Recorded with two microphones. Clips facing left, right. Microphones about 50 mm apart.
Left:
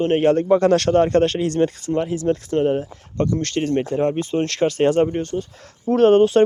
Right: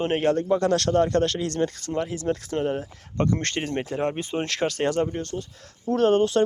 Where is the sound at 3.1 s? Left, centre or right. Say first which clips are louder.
Left 3 dB; centre.